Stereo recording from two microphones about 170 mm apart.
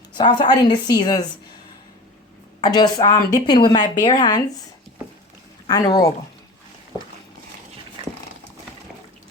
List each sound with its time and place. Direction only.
0.2 s a woman's voice: 25° left (ahead or behind)
2.6 s a woman's voice: 25° left (ahead or behind)
5.6 s a woman's voice: 25° left (ahead or behind)